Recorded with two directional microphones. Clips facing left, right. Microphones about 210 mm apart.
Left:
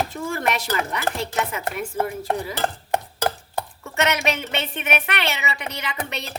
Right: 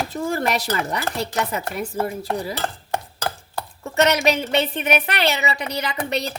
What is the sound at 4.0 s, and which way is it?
A woman's voice, 35° right (ahead or behind).